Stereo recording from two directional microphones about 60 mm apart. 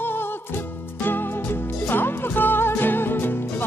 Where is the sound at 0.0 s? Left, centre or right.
Left.